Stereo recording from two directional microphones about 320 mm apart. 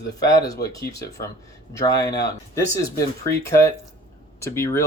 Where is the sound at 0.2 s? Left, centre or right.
Centre.